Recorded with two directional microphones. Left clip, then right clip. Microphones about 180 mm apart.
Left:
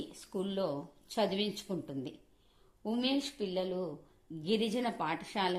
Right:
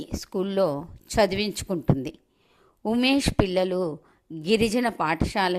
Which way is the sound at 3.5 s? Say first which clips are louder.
Right 11 dB; 40° right (ahead or behind).